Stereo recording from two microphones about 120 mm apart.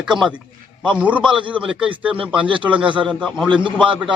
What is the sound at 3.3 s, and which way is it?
Speech, 5° left (ahead or behind).